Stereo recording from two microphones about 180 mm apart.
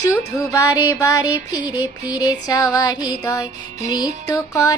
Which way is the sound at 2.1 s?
20° left (ahead or behind).